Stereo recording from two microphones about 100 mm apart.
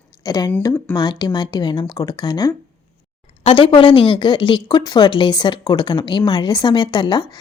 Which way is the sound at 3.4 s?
60° left (ahead or behind).